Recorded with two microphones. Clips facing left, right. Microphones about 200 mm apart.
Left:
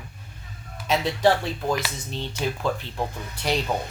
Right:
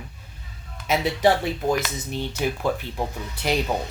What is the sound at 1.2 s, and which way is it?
Speech, 15° right (ahead or behind).